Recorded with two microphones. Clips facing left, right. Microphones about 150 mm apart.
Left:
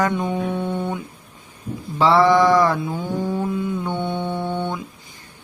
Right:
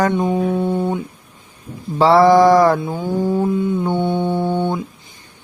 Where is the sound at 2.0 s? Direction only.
40° right (ahead or behind).